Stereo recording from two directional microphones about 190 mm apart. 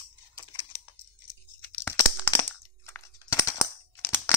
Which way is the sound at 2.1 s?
10° left (ahead or behind).